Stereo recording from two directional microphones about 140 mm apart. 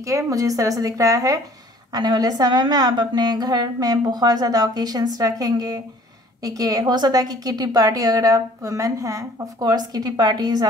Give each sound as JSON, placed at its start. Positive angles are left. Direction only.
{"t": 0.0, "sound": "a woman's voice", "side_deg": -25}